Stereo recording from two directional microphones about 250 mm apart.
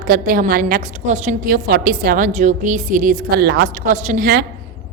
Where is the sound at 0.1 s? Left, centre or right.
Right.